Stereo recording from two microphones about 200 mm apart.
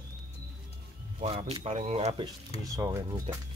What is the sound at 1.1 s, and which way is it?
Speech, 30° right (ahead or behind).